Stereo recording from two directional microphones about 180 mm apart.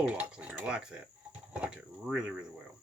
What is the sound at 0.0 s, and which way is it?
Speech, 5° right (ahead or behind).